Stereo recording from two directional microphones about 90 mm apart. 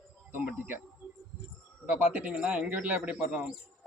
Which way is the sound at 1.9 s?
15° right (ahead or behind).